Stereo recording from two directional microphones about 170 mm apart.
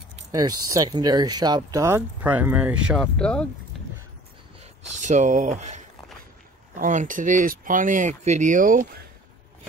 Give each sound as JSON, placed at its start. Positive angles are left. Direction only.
{"t": 0.3, "sound": "speech", "side_deg": -20}
{"t": 3.2, "sound": "speech", "side_deg": 5}
{"t": 5.0, "sound": "speech", "side_deg": -45}
{"t": 6.8, "sound": "speech", "side_deg": -50}